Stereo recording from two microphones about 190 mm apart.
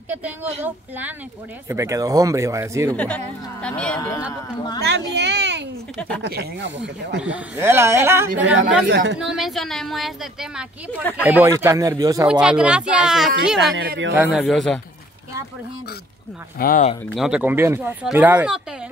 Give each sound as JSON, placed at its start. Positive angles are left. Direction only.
{"t": 0.1, "sound": "speech", "side_deg": -10}
{"t": 3.6, "sound": "a woman's voice", "side_deg": 5}
{"t": 4.7, "sound": "speech", "side_deg": -60}
{"t": 7.2, "sound": "speech", "side_deg": -5}
{"t": 8.5, "sound": "speech", "side_deg": -70}
{"t": 9.2, "sound": "a woman's voice", "side_deg": 0}
{"t": 10.9, "sound": "speech", "side_deg": 10}
{"t": 11.2, "sound": "speech", "side_deg": -10}
{"t": 12.3, "sound": "a woman's voice", "side_deg": -5}
{"t": 16.5, "sound": "speech", "side_deg": 50}
{"t": 17.0, "sound": "speech", "side_deg": 0}